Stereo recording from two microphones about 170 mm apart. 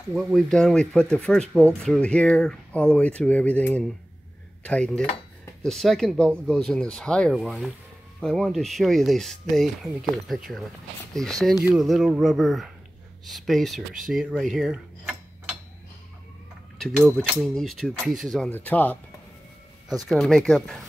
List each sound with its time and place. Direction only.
0.1 s speech: centre (ahead or behind)
11.7 s speech: centre (ahead or behind)
16.8 s speech: 5° right (ahead or behind)
18.5 s speech: 10° left (ahead or behind)